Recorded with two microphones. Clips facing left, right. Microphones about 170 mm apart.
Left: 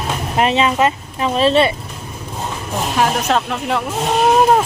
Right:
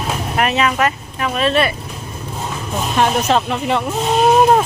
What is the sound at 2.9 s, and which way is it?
Speech, 5° left (ahead or behind).